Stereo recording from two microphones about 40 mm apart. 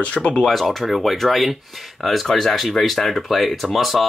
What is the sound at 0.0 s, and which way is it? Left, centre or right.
Speech, left.